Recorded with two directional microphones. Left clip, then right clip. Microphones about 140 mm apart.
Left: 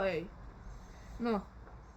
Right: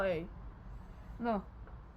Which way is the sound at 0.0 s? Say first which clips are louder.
Even; 35° right (ahead or behind).